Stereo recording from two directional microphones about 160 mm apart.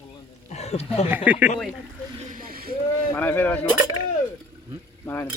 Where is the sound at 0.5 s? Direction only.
45° left (ahead or behind).